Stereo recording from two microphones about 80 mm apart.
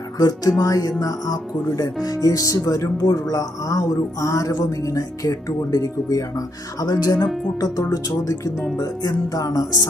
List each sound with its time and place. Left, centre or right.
0.2 s speech: left